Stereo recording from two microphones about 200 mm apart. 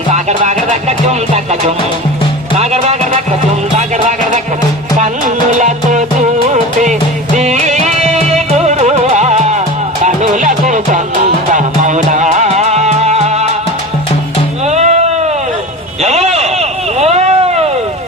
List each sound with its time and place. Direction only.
0.1 s music: 35° right (ahead or behind)
2.6 s music: 35° right (ahead or behind)
5.5 s music: 40° right (ahead or behind)
14.7 s music: 35° right (ahead or behind)
16.0 s a sound: 35° right (ahead or behind)